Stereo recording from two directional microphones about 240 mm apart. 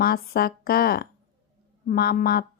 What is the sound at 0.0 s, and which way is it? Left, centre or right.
Speech, left.